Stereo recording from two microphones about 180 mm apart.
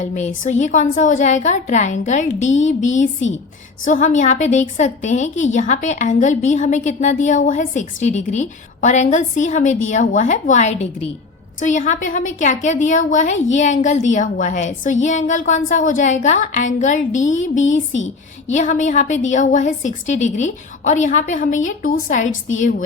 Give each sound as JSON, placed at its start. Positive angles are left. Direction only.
{"t": 0.0, "sound": "a woman's voice", "side_deg": 45}